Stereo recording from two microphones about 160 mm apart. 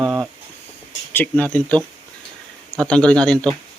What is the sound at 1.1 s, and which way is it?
Speech, 10° left (ahead or behind).